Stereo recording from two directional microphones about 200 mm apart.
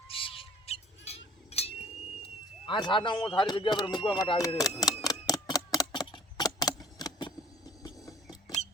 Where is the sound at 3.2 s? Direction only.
25° left (ahead or behind).